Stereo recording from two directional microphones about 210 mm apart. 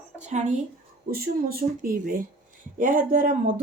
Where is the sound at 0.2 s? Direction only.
35° right (ahead or behind).